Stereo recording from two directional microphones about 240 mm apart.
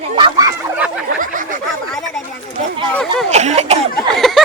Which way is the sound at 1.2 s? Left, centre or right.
Right.